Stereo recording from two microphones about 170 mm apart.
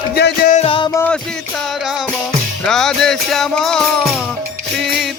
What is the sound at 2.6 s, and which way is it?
Music, 5° left (ahead or behind).